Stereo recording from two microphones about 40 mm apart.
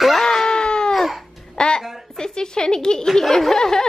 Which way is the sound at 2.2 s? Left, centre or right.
Centre.